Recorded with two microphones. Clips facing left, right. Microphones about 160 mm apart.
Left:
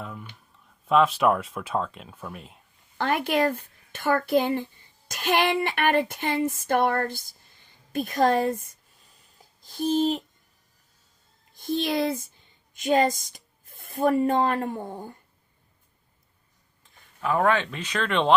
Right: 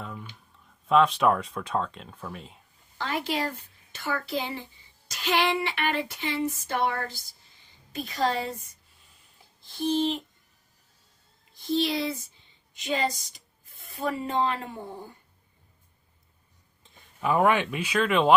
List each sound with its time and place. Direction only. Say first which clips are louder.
0.0 s a sound: left 1 dB; centre (ahead or behind)
0.5 s speech: even; centre (ahead or behind)
3.0 s a child's voice: left 6 dB; 55° left (ahead or behind)
9.6 s a sound: left 2 dB; 45° left (ahead or behind)
11.5 s speech: left 1 dB; 50° left (ahead or behind)
16.8 s speech: right 1 dB; 20° right (ahead or behind)